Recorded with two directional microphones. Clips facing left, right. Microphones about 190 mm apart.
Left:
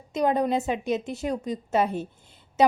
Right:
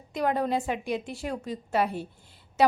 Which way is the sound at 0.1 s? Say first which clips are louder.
Left 3 dB; 20° left (ahead or behind).